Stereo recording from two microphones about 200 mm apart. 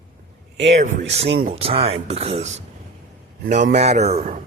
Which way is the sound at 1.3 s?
50° right (ahead or behind).